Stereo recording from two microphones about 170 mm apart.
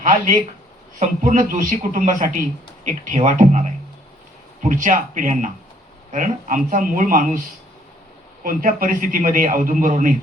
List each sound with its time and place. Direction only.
0.0 s a man's voice: 50° right (ahead or behind)
8.4 s a man's voice: 55° right (ahead or behind)